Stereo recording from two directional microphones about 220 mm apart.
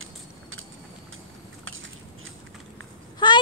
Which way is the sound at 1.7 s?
65° right (ahead or behind).